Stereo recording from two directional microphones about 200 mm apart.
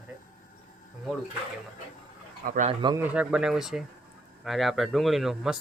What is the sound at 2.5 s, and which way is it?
Speech, 40° right (ahead or behind).